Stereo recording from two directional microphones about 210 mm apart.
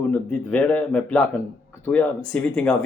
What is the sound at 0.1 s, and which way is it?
Speech, 5° left (ahead or behind).